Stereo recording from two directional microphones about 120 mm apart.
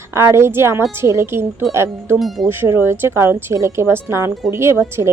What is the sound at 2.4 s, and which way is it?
Speech, 20° right (ahead or behind).